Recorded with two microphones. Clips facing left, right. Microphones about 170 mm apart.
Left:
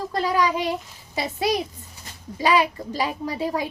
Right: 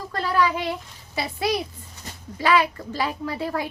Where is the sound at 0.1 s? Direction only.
15° left (ahead or behind).